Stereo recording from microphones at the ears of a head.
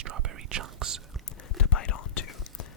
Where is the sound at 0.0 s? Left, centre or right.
Right.